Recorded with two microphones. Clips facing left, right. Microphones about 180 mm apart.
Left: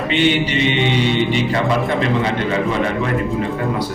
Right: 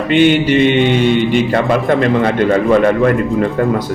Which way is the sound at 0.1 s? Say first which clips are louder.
Right 7 dB; 50° right (ahead or behind).